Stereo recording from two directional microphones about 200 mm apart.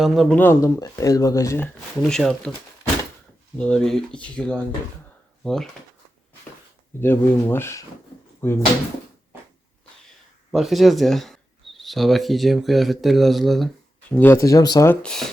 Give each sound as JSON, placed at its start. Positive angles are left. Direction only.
{"t": 0.0, "sound": "speech", "side_deg": 5}
{"t": 3.6, "sound": "speech", "side_deg": 5}
{"t": 7.0, "sound": "speech", "side_deg": 10}
{"t": 10.5, "sound": "speech", "side_deg": 0}
{"t": 15.0, "sound": "speech", "side_deg": 0}